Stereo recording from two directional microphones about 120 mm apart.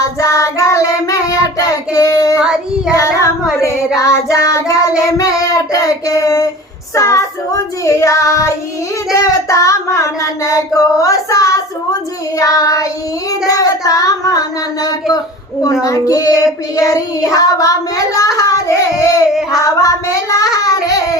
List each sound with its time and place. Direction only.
0.2 s child singing: 25° left (ahead or behind)
2.4 s child singing: 5° right (ahead or behind)
2.9 s child singing: 25° left (ahead or behind)